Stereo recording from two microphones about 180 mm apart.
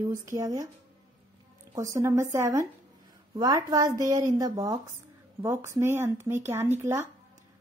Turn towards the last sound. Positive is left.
turn(degrees=-15)  # may be behind; listen again after turning